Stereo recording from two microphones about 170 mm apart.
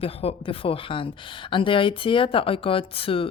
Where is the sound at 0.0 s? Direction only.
35° left (ahead or behind).